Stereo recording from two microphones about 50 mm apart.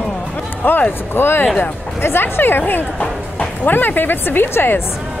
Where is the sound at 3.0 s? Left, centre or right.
Left.